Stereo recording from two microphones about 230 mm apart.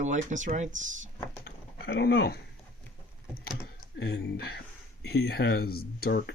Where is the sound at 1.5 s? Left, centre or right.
Left.